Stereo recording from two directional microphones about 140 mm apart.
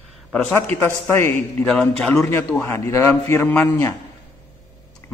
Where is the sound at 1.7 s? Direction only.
5° left (ahead or behind).